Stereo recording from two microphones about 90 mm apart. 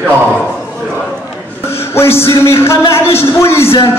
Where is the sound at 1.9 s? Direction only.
30° left (ahead or behind).